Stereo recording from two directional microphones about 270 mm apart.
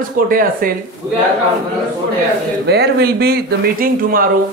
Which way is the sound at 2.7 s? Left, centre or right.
Right.